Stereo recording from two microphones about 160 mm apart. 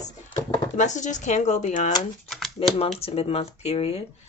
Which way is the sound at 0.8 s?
50° left (ahead or behind).